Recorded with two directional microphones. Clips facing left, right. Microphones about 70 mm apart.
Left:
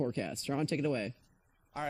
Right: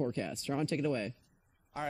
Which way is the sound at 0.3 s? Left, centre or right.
Left.